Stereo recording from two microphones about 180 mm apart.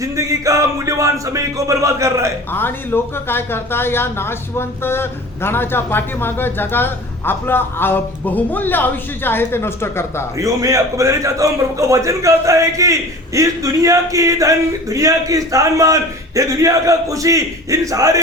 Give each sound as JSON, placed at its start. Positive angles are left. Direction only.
{"t": 0.0, "sound": "a sound", "side_deg": -20}
{"t": 2.5, "sound": "speech", "side_deg": 10}
{"t": 10.3, "sound": "a man's voice", "side_deg": -20}